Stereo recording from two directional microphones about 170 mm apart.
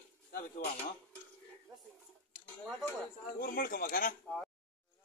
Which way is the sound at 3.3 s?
60° left (ahead or behind).